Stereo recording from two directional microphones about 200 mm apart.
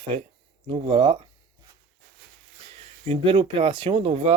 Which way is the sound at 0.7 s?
25° right (ahead or behind).